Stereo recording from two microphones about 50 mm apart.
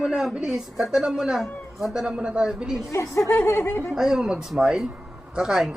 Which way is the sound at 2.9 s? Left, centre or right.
Left.